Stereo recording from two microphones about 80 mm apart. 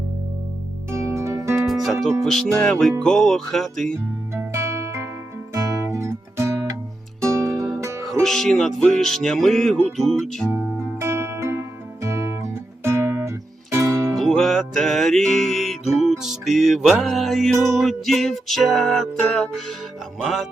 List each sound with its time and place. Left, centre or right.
1.1 s music: right
1.5 s music: centre
4.4 s music: right
8.2 s music: centre
11.0 s music: right
14.2 s music: centre